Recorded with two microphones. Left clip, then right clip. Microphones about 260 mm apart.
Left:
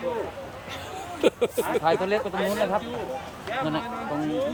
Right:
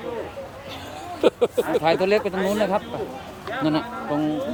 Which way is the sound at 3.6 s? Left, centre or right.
Right.